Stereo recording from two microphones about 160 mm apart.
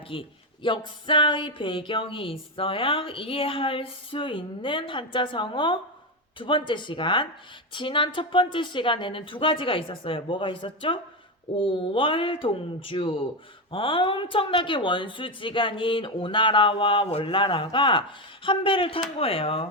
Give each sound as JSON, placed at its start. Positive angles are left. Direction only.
{"t": 0.1, "sound": "speech", "side_deg": 30}